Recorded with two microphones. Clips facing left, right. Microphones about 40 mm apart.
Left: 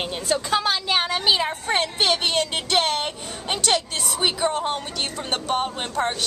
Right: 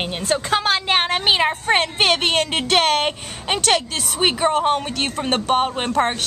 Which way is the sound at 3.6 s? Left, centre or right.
Right.